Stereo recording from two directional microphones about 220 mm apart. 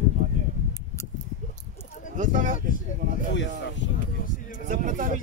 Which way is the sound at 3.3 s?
55° left (ahead or behind).